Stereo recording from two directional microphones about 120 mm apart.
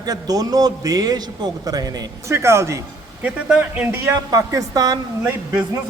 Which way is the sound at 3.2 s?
10° right (ahead or behind).